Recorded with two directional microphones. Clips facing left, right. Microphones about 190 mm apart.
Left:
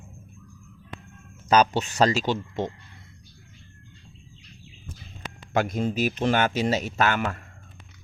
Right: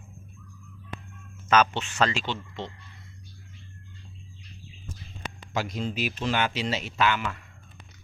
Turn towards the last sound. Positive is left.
turn(degrees=50)  # may be behind; listen again after turning